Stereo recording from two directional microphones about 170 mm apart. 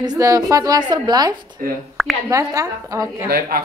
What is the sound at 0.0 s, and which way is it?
A woman's voice, 20° right (ahead or behind).